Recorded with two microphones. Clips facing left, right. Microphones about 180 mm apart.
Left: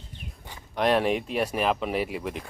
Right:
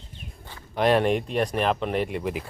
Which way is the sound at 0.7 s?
Centre (ahead or behind).